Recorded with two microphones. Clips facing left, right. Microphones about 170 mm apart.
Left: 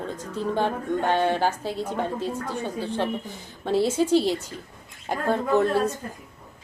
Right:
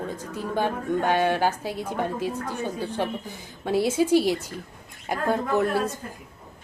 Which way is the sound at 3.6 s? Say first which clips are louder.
Even; 10° right (ahead or behind).